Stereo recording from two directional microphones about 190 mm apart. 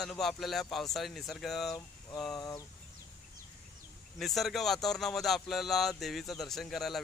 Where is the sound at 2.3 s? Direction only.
20° left (ahead or behind).